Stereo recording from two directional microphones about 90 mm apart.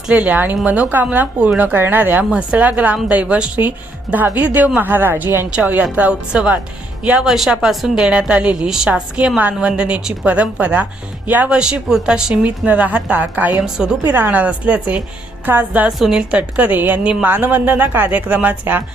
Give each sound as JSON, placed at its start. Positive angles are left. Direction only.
{"t": 0.1, "sound": "a woman's voice", "side_deg": -15}
{"t": 13.6, "sound": "a woman's voice", "side_deg": -5}
{"t": 14.1, "sound": "a woman's voice", "side_deg": -20}
{"t": 15.9, "sound": "a woman's voice", "side_deg": -5}
{"t": 16.4, "sound": "speech", "side_deg": -20}